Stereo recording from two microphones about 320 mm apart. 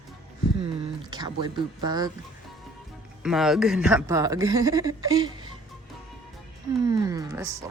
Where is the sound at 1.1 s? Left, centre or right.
Centre.